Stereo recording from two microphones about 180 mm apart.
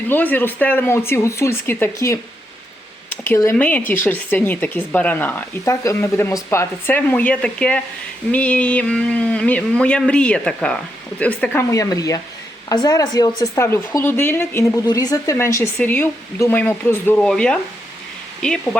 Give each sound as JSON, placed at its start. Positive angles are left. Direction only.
{"t": 0.1, "sound": "speech", "side_deg": 10}
{"t": 3.2, "sound": "speech", "side_deg": 15}
{"t": 11.7, "sound": "speech", "side_deg": 20}